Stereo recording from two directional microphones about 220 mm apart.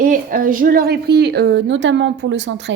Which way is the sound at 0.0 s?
40° right (ahead or behind).